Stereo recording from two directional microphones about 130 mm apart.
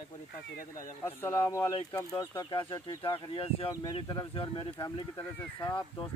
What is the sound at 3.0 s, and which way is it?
Speech, 45° left (ahead or behind).